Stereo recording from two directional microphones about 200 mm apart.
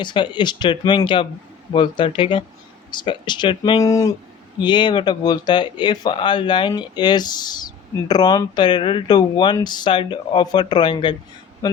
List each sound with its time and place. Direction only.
0.0 s speech: 25° left (ahead or behind)